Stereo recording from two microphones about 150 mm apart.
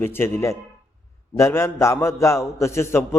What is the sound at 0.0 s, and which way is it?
A man's voice, 15° left (ahead or behind).